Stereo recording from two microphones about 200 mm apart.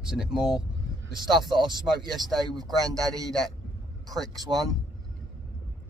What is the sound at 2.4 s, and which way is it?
Speech, 20° right (ahead or behind).